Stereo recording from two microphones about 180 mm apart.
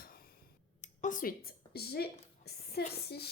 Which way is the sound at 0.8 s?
45° left (ahead or behind).